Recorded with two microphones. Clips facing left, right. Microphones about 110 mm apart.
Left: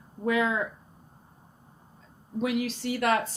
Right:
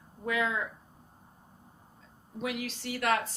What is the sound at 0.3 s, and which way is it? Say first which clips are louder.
Speech: left 5 dB; 30° left (ahead or behind).